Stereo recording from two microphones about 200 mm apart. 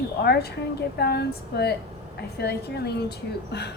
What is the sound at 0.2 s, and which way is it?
A woman's voice, 50° left (ahead or behind).